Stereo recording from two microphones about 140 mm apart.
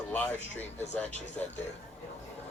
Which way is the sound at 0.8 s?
55° left (ahead or behind).